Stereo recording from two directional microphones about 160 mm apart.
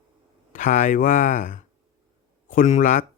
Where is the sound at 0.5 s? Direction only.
55° left (ahead or behind).